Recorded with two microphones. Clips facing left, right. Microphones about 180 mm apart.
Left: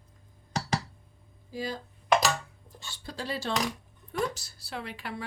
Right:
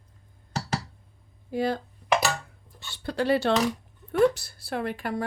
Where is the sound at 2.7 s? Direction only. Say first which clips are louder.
Right 10 dB; 65° right (ahead or behind).